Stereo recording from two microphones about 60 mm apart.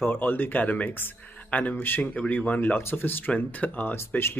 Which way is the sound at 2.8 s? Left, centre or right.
Left.